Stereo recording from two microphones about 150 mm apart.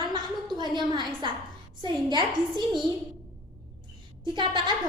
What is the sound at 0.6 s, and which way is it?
Speech, 30° right (ahead or behind).